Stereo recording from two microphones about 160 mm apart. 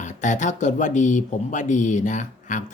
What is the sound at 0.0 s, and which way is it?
Speech, 50° left (ahead or behind).